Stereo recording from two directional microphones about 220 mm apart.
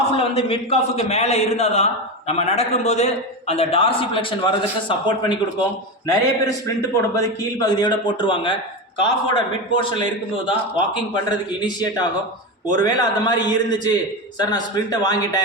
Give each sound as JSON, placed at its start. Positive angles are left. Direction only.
{"t": 0.1, "sound": "a man's voice", "side_deg": 25}
{"t": 15.0, "sound": "a man's voice", "side_deg": 15}